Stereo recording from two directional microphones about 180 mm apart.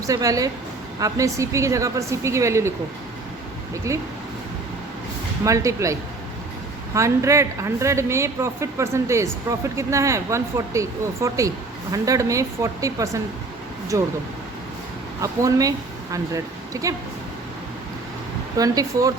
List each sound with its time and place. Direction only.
0.0 s a woman's voice: 20° right (ahead or behind)
3.9 s a woman's voice: 15° right (ahead or behind)
5.5 s a woman's voice: 15° right (ahead or behind)
15.2 s speech: 20° right (ahead or behind)
16.7 s speech: 20° right (ahead or behind)
18.5 s speech: 20° right (ahead or behind)